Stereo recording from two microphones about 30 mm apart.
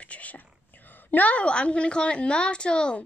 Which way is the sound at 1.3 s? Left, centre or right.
Left.